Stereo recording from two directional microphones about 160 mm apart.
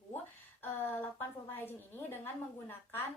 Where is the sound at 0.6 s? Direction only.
15° left (ahead or behind).